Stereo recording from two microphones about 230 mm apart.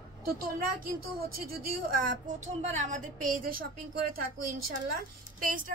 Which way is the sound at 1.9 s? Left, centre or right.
Right.